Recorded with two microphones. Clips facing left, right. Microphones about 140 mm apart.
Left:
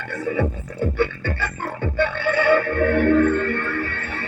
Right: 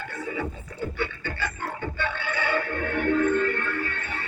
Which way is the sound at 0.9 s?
60° left (ahead or behind).